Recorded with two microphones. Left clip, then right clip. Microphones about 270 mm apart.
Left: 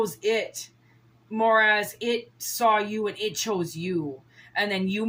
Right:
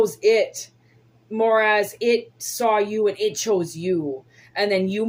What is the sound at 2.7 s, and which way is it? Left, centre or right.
Speech, left.